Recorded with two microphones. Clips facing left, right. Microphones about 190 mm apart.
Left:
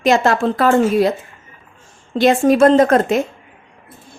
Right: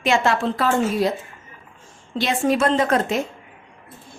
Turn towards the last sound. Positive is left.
turn(degrees=45)  # may be behind; listen again after turning